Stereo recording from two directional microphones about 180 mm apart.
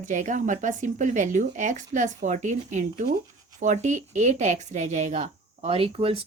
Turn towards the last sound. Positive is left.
turn(degrees=-30)  # may be behind; listen again after turning